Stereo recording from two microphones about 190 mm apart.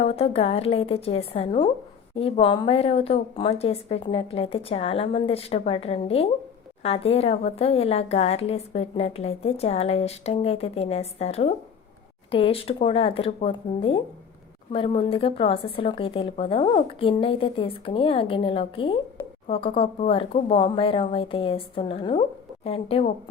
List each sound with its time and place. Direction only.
0.0 s a woman's voice: 30° left (ahead or behind)